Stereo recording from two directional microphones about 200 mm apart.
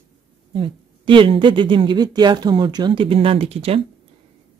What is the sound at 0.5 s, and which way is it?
Speech, 25° right (ahead or behind).